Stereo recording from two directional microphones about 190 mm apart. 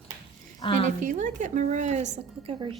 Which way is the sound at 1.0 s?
40° right (ahead or behind).